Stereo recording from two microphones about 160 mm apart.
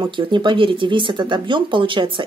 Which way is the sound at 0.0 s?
30° right (ahead or behind).